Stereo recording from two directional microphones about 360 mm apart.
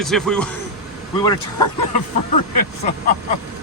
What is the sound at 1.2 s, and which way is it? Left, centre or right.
Speech, centre.